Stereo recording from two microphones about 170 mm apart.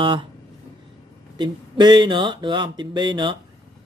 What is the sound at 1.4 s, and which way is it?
Speech, 25° right (ahead or behind).